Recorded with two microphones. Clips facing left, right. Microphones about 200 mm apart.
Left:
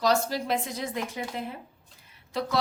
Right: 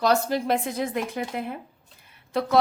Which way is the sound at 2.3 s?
55° right (ahead or behind).